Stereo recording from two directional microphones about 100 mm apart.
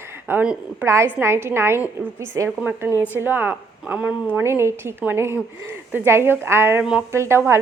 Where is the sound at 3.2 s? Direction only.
20° right (ahead or behind).